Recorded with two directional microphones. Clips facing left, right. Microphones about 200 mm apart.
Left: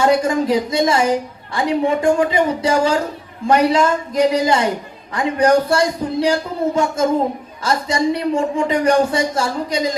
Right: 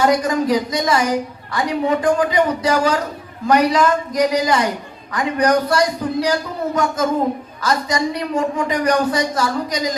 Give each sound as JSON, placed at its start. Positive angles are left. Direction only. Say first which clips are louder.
{"t": 0.0, "sound": "a man's voice", "louder": "left 1 dB", "side_deg": 25}